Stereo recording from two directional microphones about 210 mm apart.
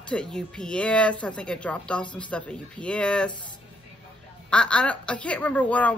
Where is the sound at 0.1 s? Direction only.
5° left (ahead or behind).